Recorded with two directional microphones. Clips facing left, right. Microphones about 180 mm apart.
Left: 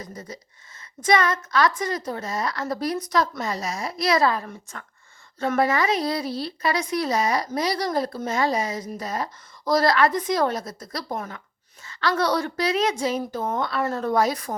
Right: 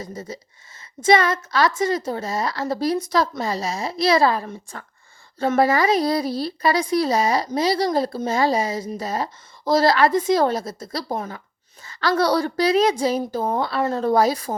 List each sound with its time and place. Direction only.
0.0 s a woman's voice: 25° right (ahead or behind)